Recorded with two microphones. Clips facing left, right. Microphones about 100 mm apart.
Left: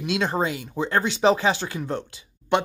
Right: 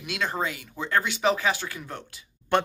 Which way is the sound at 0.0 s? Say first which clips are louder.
Left 5 dB; 25° left (ahead or behind).